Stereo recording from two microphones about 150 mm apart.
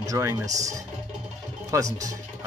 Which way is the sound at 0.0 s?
20° right (ahead or behind).